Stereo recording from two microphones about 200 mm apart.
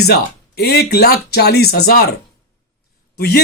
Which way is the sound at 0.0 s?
55° left (ahead or behind).